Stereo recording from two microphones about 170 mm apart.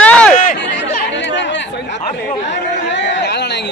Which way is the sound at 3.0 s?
90° left.